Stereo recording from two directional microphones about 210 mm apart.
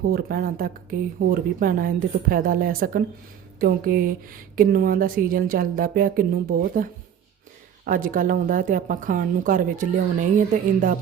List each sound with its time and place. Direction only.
0.1 s a woman's voice: 45° right (ahead or behind)
7.9 s a woman's voice: 40° right (ahead or behind)